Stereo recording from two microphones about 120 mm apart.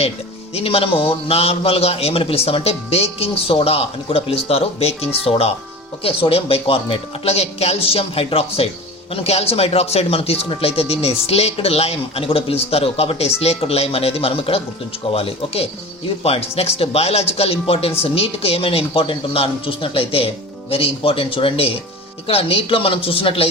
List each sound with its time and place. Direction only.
0.5 s speech: 55° left (ahead or behind)